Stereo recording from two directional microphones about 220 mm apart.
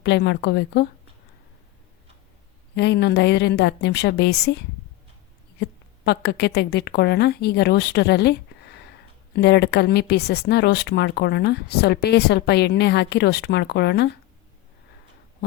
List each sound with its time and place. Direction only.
0.0 s speech: 50° left (ahead or behind)
2.7 s speech: 50° left (ahead or behind)
6.1 s speech: 50° left (ahead or behind)